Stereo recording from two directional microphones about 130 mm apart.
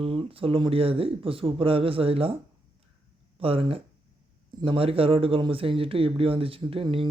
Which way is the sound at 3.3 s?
45° right (ahead or behind).